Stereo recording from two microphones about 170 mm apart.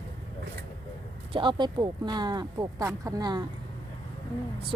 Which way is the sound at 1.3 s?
30° right (ahead or behind).